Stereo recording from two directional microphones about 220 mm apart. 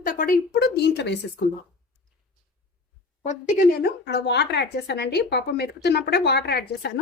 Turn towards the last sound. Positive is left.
turn(degrees=45)  # may be behind; listen again after turning